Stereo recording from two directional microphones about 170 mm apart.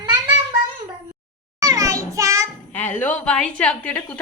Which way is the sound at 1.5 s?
20° right (ahead or behind).